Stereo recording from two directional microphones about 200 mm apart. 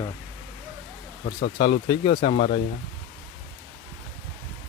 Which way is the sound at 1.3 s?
50° left (ahead or behind).